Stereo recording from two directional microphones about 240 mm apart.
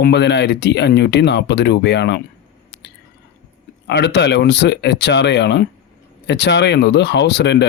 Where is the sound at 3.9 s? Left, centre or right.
Left.